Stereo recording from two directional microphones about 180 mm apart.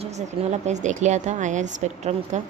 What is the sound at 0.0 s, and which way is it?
Speech, 40° right (ahead or behind).